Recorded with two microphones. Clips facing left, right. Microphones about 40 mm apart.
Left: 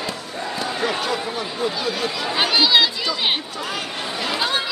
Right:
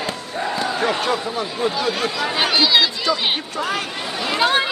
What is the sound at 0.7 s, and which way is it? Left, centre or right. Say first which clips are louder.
Speech: right 1 dB; right.